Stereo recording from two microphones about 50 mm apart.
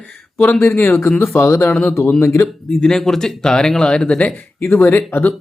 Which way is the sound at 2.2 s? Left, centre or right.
Left.